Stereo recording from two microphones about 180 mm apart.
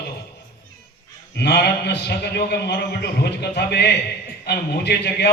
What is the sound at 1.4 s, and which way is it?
A man's voice, 65° left (ahead or behind).